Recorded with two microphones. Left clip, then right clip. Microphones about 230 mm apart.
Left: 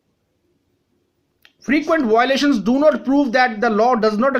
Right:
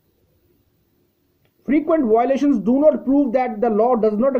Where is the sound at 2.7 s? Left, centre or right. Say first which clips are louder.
Right 1 dB; centre.